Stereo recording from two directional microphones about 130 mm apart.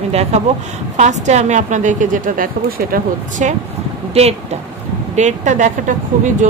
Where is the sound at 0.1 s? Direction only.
55° right (ahead or behind); by 3.5 s 80° right.